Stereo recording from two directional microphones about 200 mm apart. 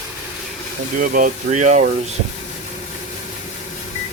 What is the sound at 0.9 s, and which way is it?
Speech, 45° right (ahead or behind).